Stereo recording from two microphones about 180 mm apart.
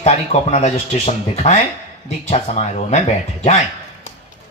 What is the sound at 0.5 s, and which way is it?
Speech, 35° left (ahead or behind).